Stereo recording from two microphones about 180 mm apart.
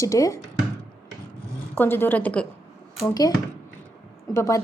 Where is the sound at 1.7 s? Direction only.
10° left (ahead or behind).